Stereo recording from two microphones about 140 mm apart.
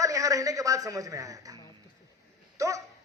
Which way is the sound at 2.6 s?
25° right (ahead or behind).